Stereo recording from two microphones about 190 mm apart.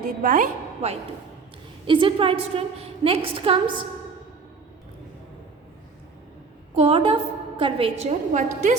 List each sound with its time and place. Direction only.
0.2 s a woman's voice: 40° right (ahead or behind)
1.9 s a woman's voice: 25° right (ahead or behind)
6.7 s a woman's voice: 30° right (ahead or behind)